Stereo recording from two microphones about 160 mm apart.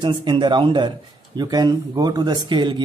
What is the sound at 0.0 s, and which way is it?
Speech, 30° right (ahead or behind).